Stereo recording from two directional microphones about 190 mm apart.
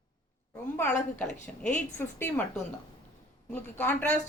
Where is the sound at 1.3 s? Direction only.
40° left (ahead or behind).